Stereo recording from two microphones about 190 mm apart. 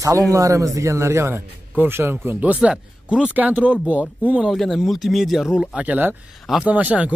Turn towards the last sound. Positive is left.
turn(degrees=-5)  # may be behind; listen again after turning